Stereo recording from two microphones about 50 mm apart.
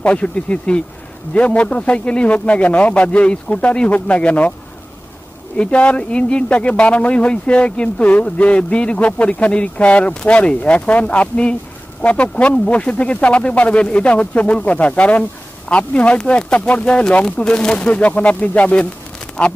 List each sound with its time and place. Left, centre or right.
0.0 s speech: left
5.6 s speech: left